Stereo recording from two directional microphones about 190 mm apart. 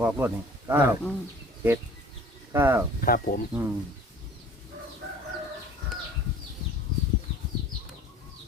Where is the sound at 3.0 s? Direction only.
50° left (ahead or behind).